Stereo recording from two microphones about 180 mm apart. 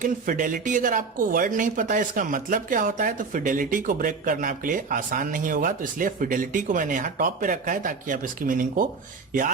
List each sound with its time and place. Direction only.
0.0 s speech: 50° right (ahead or behind)